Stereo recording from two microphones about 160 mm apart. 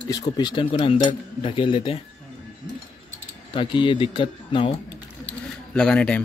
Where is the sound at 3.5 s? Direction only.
30° left (ahead or behind).